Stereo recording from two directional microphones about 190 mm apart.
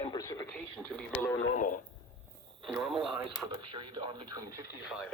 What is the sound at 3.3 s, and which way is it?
Speech, 25° right (ahead or behind).